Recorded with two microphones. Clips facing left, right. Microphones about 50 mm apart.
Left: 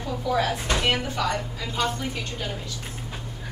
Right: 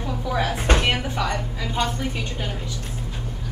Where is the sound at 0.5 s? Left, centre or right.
Right.